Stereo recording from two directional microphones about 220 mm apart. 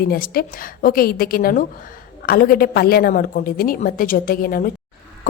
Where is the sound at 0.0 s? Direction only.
45° left (ahead or behind).